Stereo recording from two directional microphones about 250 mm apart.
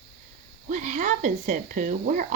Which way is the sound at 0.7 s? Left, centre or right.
Right.